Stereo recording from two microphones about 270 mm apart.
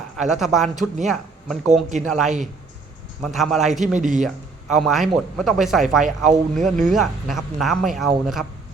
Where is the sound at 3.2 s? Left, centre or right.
Centre.